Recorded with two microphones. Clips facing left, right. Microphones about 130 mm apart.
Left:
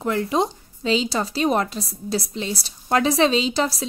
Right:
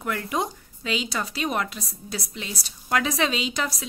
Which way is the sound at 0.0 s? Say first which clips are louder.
Left 6 dB; 25° left (ahead or behind).